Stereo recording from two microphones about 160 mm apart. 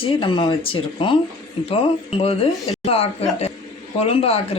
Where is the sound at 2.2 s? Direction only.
40° left (ahead or behind).